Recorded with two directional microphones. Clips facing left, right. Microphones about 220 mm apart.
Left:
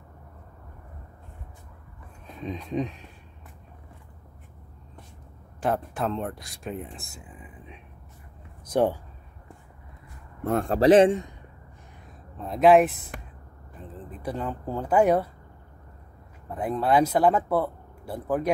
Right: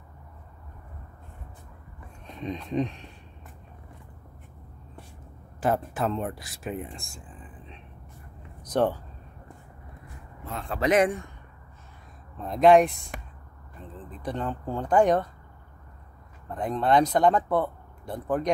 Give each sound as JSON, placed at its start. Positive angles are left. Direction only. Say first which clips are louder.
{"t": 2.2, "sound": "speech", "louder": "right 1 dB", "side_deg": 5}
{"t": 5.6, "sound": "speech", "louder": "right 1 dB", "side_deg": 0}
{"t": 10.4, "sound": "speech", "louder": "left 8 dB", "side_deg": 50}
{"t": 12.4, "sound": "speech", "louder": "even", "side_deg": 5}
{"t": 16.4, "sound": "speech", "louder": "even", "side_deg": 5}